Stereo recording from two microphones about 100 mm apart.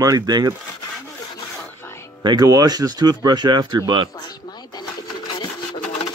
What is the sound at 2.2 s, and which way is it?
Speech, 40° right (ahead or behind).